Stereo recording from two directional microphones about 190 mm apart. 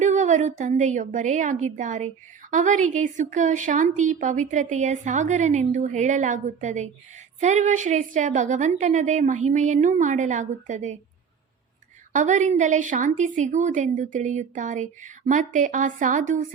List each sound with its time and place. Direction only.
0.0 s a woman's voice: 40° right (ahead or behind)
12.1 s a woman's voice: 40° right (ahead or behind)